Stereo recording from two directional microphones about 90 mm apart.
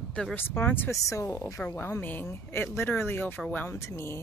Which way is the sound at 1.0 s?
35° left (ahead or behind).